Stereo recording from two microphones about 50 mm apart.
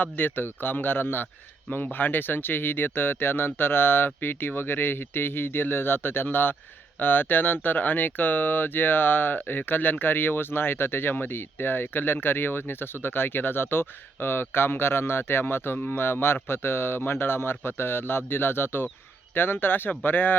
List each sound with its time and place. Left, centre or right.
0.0 s speech: left